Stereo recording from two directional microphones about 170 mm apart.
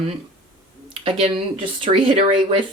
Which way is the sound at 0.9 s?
30° right (ahead or behind).